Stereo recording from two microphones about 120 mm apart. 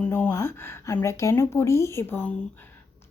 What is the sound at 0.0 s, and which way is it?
A woman's voice, 15° left (ahead or behind).